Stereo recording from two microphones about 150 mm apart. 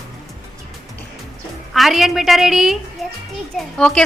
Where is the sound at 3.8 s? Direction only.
5° left (ahead or behind).